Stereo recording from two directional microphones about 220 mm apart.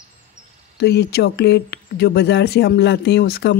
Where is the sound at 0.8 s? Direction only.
50° left (ahead or behind).